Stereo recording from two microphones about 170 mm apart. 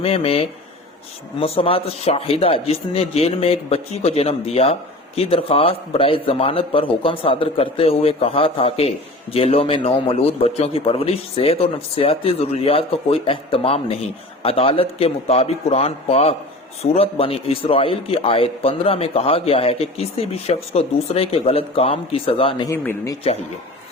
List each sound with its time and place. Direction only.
0.0 s speech: 35° left (ahead or behind)
22.7 s speech: 15° left (ahead or behind)